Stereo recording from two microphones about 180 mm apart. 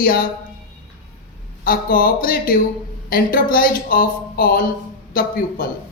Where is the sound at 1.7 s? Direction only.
55° left (ahead or behind).